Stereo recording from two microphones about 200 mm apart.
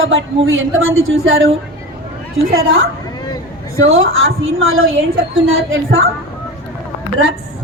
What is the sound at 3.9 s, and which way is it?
A woman's voice, 80° right.